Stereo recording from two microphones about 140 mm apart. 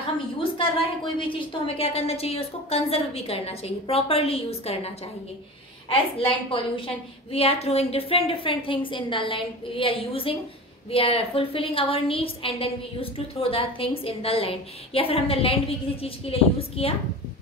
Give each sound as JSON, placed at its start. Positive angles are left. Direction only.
{"t": 0.4, "sound": "a woman's voice", "side_deg": 40}